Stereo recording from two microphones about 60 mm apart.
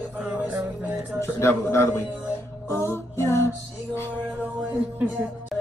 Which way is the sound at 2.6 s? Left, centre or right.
Left.